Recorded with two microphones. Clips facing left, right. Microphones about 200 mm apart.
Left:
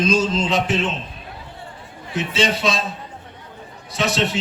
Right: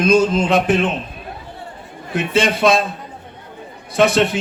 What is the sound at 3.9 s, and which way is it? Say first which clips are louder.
Speech: right 7 dB; 55° right (ahead or behind).